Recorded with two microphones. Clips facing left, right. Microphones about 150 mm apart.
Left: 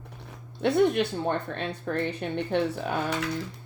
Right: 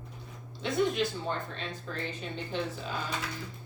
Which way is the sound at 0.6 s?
65° left (ahead or behind).